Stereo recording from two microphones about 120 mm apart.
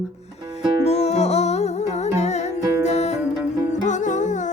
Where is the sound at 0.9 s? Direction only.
65° left (ahead or behind).